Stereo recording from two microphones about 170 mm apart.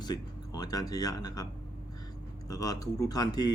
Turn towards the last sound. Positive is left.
turn(degrees=25)  # may be behind; listen again after turning